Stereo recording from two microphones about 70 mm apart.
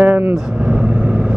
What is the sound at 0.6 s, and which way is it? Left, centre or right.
Vehicle, right.